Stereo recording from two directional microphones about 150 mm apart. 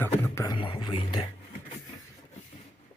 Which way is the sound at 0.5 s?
35° left (ahead or behind).